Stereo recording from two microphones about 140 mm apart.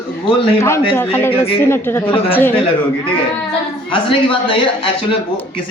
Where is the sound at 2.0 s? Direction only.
40° left (ahead or behind).